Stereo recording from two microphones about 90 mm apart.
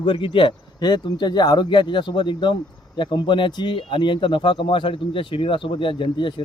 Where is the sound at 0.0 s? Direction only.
65° left (ahead or behind).